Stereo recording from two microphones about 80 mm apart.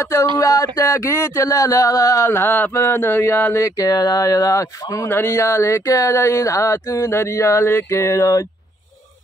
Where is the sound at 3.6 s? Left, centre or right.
Left.